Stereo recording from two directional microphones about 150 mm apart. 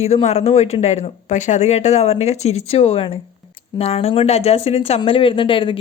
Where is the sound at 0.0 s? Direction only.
45° left (ahead or behind).